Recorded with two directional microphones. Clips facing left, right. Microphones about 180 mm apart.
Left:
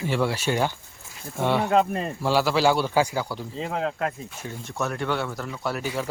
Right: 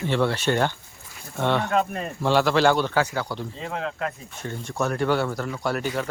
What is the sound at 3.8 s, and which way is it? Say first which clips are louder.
Speech: left 2 dB; 30° left (ahead or behind).